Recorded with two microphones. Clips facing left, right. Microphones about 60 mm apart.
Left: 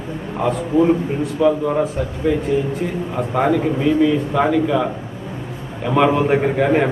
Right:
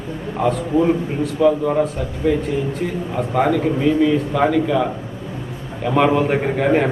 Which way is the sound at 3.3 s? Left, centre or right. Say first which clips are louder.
Even; centre.